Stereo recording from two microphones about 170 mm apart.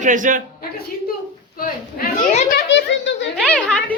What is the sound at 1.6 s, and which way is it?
Speech, 45° left (ahead or behind).